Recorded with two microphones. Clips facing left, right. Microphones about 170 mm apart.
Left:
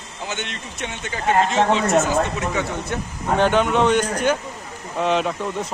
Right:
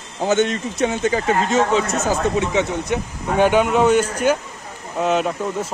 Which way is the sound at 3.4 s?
10° right (ahead or behind).